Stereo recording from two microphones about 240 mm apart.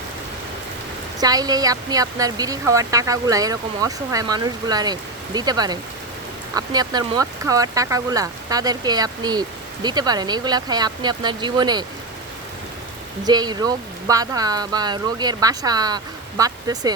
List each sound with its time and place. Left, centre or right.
1.2 s speech: centre
13.2 s speech: centre